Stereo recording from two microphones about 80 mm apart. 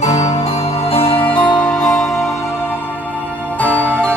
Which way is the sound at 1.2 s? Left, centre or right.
Left.